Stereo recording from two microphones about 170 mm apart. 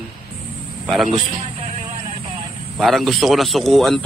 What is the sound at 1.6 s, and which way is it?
Music, 45° right (ahead or behind).